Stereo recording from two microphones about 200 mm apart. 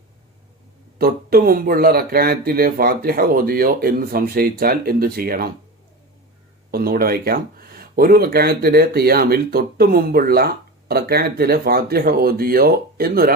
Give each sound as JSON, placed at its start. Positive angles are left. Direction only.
{"t": 0.9, "sound": "speech", "side_deg": -50}
{"t": 6.7, "sound": "speech", "side_deg": -50}